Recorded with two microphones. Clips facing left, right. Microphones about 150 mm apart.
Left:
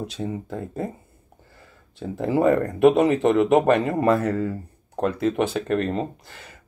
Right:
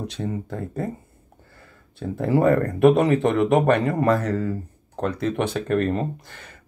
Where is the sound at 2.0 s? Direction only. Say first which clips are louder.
Right 1 dB; centre (ahead or behind).